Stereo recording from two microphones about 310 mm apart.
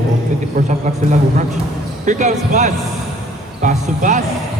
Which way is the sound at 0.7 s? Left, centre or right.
Right.